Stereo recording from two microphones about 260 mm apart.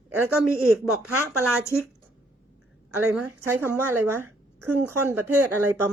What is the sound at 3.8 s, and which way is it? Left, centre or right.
Speech, right.